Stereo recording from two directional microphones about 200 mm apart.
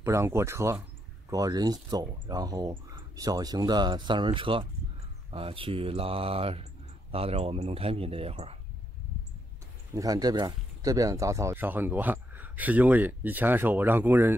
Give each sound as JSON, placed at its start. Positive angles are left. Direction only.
{"t": 0.0, "sound": "speech", "side_deg": -15}
{"t": 9.9, "sound": "speech", "side_deg": -20}